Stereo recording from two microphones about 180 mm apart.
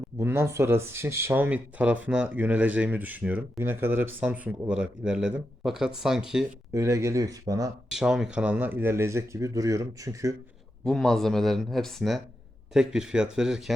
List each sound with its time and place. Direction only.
0.2 s speech: 15° right (ahead or behind)
6.7 s speech: 15° right (ahead or behind)
7.9 s speech: 5° right (ahead or behind)
10.8 s speech: centre (ahead or behind)